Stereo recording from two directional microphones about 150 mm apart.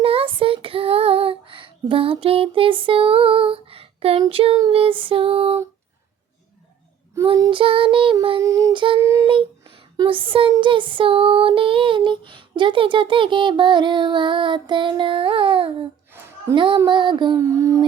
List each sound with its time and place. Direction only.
0.0 s female singing: 40° right (ahead or behind)
7.2 s child singing: 20° right (ahead or behind)
7.5 s female singing: 35° right (ahead or behind)
8.4 s speech: 20° right (ahead or behind)
9.2 s speech: 35° right (ahead or behind)
10.5 s female singing: 35° right (ahead or behind)
16.1 s a sound: 15° right (ahead or behind)
16.6 s female singing: 30° right (ahead or behind)
17.3 s speech: 20° right (ahead or behind)